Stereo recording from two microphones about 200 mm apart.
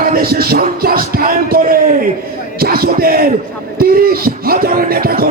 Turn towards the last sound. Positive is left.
turn(degrees=-50)  # may be behind; listen again after turning